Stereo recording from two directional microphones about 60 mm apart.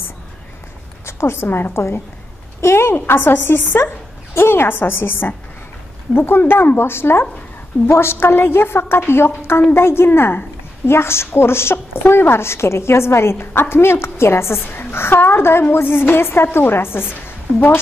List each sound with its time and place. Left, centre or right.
1.0 s a woman's voice: left